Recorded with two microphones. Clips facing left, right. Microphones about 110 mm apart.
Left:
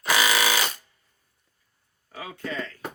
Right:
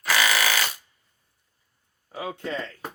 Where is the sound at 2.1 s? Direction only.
25° right (ahead or behind).